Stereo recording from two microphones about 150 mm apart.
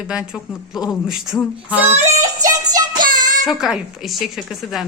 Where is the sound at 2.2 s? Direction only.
25° right (ahead or behind).